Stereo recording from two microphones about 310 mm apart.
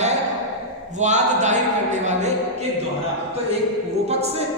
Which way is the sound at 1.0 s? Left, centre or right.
Right.